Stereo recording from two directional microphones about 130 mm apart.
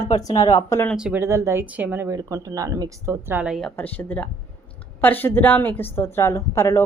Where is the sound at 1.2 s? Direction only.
20° right (ahead or behind).